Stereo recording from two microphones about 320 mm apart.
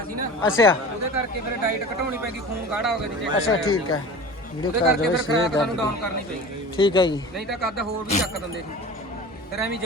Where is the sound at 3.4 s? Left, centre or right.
Left.